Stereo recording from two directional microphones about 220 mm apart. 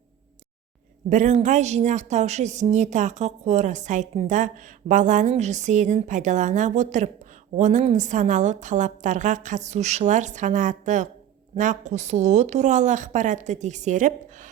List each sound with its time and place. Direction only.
1.1 s speech: 35° right (ahead or behind)